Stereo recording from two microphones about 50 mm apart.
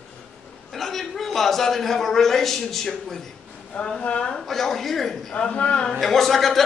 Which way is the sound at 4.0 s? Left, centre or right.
Centre.